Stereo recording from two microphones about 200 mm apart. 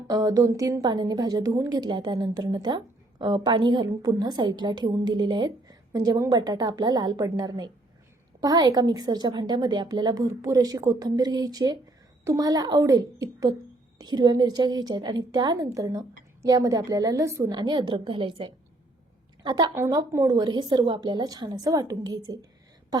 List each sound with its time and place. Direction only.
0.1 s a woman's voice: 20° right (ahead or behind)